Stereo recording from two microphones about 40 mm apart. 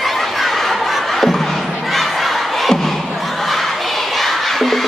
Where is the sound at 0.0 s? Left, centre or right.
Centre.